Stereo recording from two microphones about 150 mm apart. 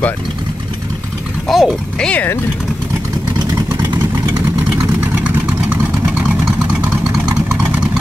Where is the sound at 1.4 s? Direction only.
Centre (ahead or behind).